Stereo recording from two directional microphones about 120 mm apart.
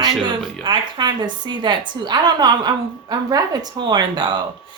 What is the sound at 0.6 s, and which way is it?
A woman's voice, 35° right (ahead or behind).